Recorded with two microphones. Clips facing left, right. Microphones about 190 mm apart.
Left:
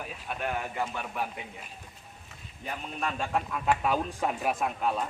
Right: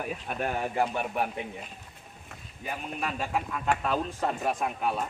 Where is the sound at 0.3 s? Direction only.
45° right (ahead or behind).